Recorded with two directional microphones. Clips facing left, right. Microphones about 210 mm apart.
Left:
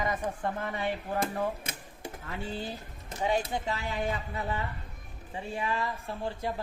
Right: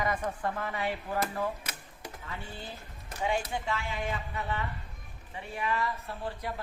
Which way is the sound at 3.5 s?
40° left (ahead or behind).